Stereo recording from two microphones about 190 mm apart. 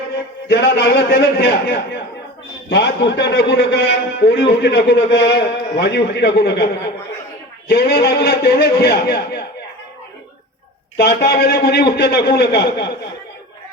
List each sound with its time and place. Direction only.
0.4 s a man's voice: 60° left (ahead or behind)
7.7 s a man's voice: 55° left (ahead or behind)
10.9 s a man's voice: 55° left (ahead or behind)